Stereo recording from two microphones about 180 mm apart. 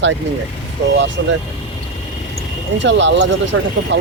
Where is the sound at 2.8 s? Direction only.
90° right.